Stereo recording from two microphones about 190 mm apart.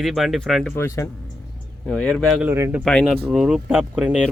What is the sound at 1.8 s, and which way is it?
Speech, 5° left (ahead or behind).